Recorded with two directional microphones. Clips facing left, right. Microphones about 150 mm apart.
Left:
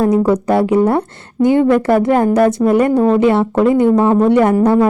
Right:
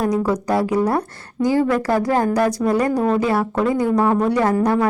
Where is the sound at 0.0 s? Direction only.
25° left (ahead or behind).